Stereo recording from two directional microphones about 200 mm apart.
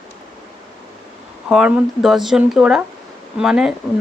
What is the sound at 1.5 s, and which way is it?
A woman's voice, 5° right (ahead or behind).